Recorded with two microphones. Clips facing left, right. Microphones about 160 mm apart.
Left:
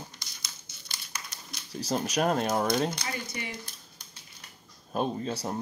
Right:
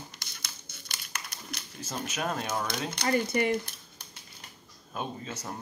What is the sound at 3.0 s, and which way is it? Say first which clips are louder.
Speech: right 10 dB; 60° right (ahead or behind).